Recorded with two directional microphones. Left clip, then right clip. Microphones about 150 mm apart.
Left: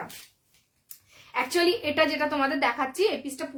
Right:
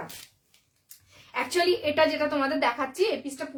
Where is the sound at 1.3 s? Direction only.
20° left (ahead or behind).